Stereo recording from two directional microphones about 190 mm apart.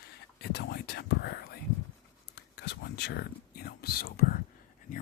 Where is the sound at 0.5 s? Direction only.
60° left (ahead or behind).